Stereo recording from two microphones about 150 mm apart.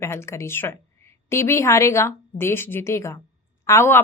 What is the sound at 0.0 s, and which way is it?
Speech, 15° left (ahead or behind).